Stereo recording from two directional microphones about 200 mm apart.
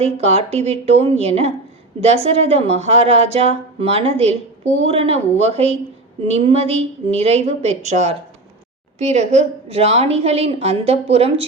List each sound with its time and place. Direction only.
0.0 s a woman's voice: 30° right (ahead or behind)